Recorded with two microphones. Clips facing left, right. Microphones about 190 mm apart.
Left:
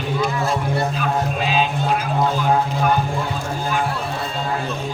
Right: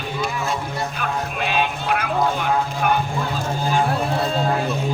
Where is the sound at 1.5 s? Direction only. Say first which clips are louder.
Left 1 dB; 65° right (ahead or behind).